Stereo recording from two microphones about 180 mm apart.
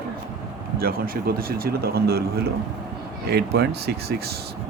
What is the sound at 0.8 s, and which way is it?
Speech, 55° right (ahead or behind).